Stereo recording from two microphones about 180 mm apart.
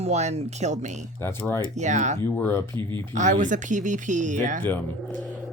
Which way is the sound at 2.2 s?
15° left (ahead or behind).